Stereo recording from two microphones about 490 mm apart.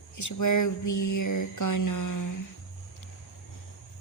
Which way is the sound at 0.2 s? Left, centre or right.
Left.